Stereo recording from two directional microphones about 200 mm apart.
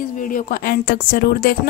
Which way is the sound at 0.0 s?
45° left (ahead or behind).